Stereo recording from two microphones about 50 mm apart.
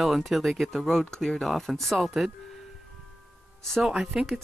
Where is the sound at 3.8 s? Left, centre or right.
Centre.